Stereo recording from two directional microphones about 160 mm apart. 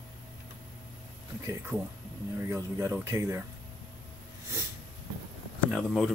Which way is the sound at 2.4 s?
15° right (ahead or behind).